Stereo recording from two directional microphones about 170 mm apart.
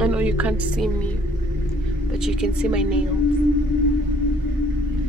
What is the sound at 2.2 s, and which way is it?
Speech, 5° right (ahead or behind).